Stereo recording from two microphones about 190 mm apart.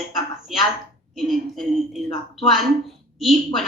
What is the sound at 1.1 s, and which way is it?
A woman's voice, centre (ahead or behind).